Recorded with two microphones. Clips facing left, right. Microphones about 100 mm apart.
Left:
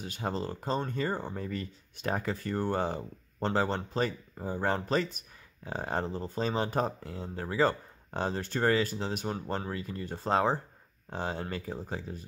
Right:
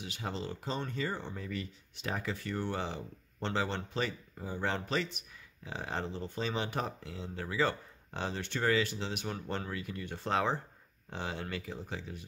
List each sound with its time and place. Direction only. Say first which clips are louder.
0.0 s speech: left 5 dB; 40° left (ahead or behind)